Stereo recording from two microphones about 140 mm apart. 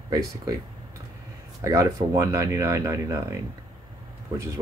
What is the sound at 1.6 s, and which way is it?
Speech, 25° right (ahead or behind).